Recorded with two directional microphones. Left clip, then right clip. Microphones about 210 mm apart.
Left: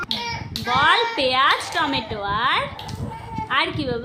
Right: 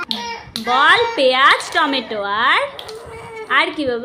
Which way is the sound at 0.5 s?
15° right (ahead or behind).